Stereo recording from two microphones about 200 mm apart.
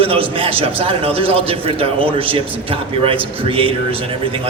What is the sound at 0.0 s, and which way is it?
A man's voice, 25° right (ahead or behind).